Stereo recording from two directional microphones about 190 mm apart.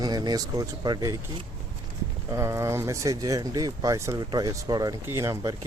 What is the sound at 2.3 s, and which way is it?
Speech, 15° right (ahead or behind).